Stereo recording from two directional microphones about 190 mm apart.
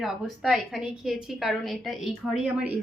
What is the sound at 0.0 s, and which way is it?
A woman's voice, centre (ahead or behind).